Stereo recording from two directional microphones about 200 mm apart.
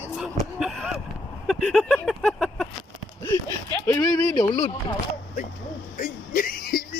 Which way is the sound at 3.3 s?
15° left (ahead or behind).